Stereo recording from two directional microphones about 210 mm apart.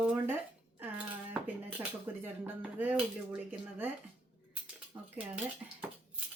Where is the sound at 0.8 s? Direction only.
5° right (ahead or behind).